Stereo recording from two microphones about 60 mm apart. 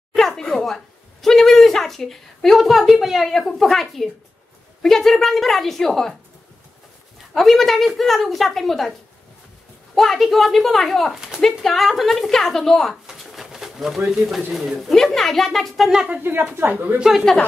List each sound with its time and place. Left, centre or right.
0.1 s a sound: centre
1.2 s speech: centre
7.3 s speech: centre
9.9 s speech: centre
13.0 s pigeon: centre
14.5 s speech: centre
16.2 s a woman's voice: right
17.0 s speech: centre